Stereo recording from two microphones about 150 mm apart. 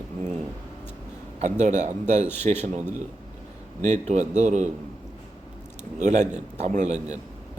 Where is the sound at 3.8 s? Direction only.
50° right (ahead or behind).